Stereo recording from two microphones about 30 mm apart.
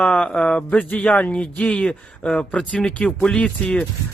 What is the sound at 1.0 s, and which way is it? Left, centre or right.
Speech, left.